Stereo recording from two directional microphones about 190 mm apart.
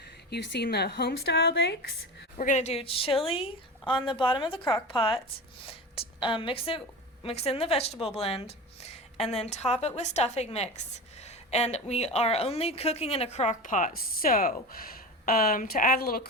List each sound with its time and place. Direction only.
0.3 s speech: 60° left (ahead or behind)
2.4 s a woman's voice: 40° left (ahead or behind)
8.2 s a sound: 30° left (ahead or behind)
9.3 s a woman's voice: 35° left (ahead or behind); by 16.2 s 50° left (ahead or behind)